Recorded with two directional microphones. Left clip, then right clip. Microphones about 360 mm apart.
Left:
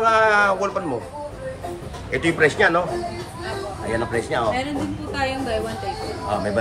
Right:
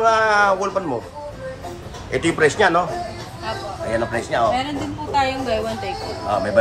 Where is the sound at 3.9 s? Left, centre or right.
Centre.